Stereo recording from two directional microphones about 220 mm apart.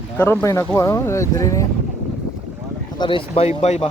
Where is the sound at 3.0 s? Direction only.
25° left (ahead or behind).